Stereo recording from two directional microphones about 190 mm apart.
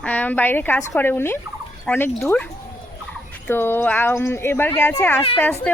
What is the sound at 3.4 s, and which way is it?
A woman's voice, 10° left (ahead or behind).